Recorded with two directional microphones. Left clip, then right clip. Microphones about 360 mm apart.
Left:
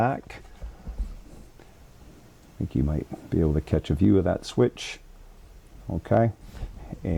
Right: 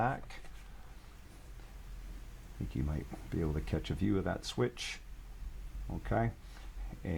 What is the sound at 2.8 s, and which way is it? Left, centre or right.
Speech, left.